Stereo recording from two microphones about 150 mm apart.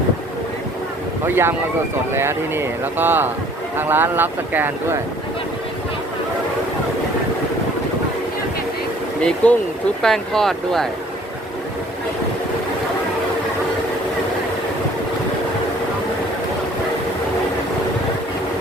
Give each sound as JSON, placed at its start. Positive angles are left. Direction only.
{"t": 1.2, "sound": "speech", "side_deg": -15}
{"t": 9.2, "sound": "speech", "side_deg": 10}